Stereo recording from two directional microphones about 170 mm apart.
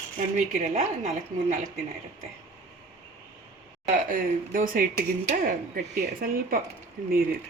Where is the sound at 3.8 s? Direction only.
50° right (ahead or behind).